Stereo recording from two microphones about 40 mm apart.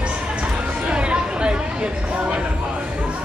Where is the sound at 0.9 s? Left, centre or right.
Right.